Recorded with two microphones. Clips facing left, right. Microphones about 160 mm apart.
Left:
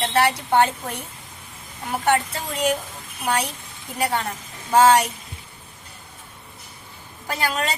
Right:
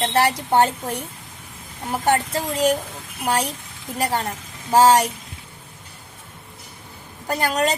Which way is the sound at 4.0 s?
40° right (ahead or behind).